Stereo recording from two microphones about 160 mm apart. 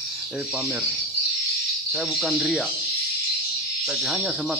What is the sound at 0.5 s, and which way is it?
Speech, 5° right (ahead or behind).